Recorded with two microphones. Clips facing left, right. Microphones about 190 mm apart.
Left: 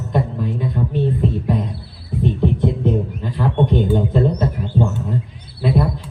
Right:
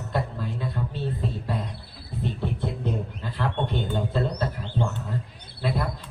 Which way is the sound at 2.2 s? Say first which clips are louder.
Left 11 dB; 15° left (ahead or behind).